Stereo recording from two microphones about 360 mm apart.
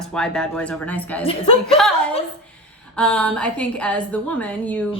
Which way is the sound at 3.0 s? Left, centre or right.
Centre.